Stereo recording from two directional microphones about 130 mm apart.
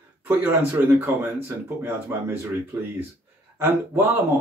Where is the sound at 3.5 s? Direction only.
15° right (ahead or behind).